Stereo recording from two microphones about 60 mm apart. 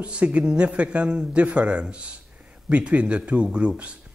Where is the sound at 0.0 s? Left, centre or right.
Right.